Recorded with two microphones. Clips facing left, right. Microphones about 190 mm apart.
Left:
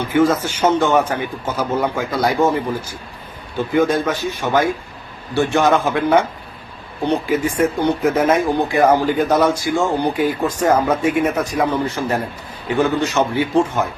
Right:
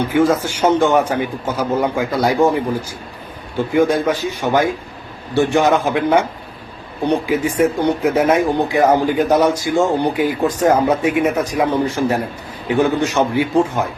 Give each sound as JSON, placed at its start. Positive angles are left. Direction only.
{"t": 0.2, "sound": "speech", "side_deg": -15}
{"t": 3.8, "sound": "speech", "side_deg": -10}